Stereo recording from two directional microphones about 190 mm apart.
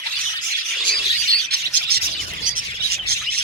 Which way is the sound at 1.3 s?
55° right (ahead or behind).